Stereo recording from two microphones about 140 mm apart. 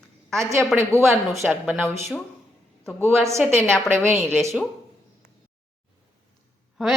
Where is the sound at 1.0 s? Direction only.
Centre (ahead or behind).